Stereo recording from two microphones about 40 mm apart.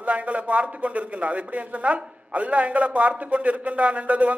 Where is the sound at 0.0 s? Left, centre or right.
Right.